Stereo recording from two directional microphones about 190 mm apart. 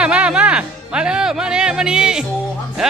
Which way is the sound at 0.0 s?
5° right (ahead or behind).